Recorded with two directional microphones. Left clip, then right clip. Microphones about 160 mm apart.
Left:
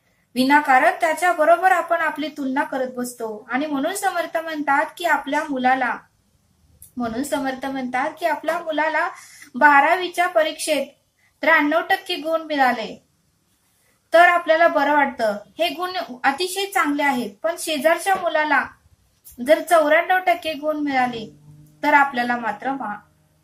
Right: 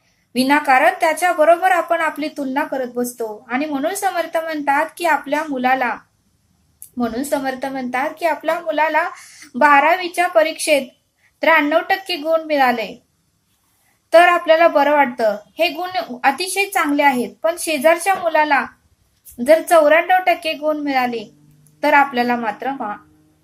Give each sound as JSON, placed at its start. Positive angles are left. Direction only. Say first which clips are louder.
{"t": 0.4, "sound": "speech", "louder": "right 2 dB", "side_deg": -30}
{"t": 7.0, "sound": "speech", "louder": "right 3 dB", "side_deg": -30}
{"t": 14.1, "sound": "speech", "louder": "right 3 dB", "side_deg": -30}